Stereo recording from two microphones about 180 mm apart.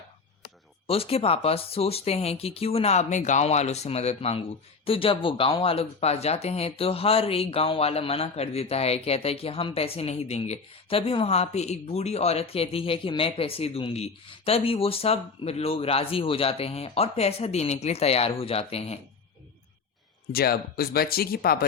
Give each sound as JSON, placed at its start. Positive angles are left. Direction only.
{"t": 0.9, "sound": "speech", "side_deg": 30}
{"t": 20.3, "sound": "speech", "side_deg": 60}